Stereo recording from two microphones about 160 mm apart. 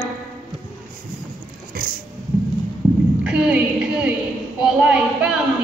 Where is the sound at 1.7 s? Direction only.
65° right (ahead or behind).